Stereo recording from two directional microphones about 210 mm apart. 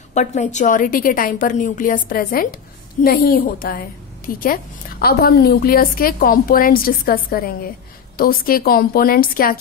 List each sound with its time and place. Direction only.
0.1 s a woman's voice: 35° left (ahead or behind)